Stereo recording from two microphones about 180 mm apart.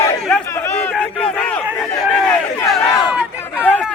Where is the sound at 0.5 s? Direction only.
10° left (ahead or behind).